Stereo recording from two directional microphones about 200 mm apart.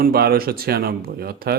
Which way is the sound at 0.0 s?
50° right (ahead or behind).